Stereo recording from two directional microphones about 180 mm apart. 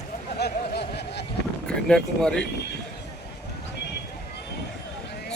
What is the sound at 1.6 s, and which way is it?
Speech, 5° left (ahead or behind).